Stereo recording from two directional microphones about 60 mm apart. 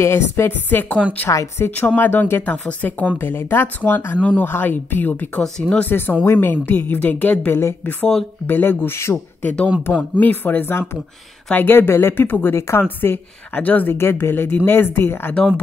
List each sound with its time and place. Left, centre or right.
0.0 s a woman's voice: left
0.5 s speech: left
1.6 s a woman's voice: left
2.0 s speech: left
3.2 s speech: left
4.2 s speech: left
5.4 s speech: centre
5.9 s speech: left
9.4 s speech: left
12.5 s a woman's voice: left
12.8 s speech: left
13.6 s speech: left
13.9 s speech: left